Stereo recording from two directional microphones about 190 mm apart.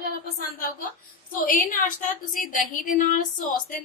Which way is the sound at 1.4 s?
45° left (ahead or behind).